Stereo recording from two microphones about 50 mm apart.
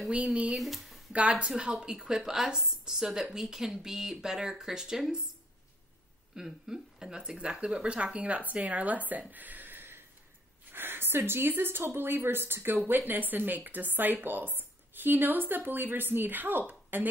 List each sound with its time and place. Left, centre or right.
0.1 s speech: right
0.6 s speech: centre
1.6 s a woman's voice: centre
6.3 s speech: centre; by 9.2 s right
9.3 s a sound: right
10.7 s a woman's voice: right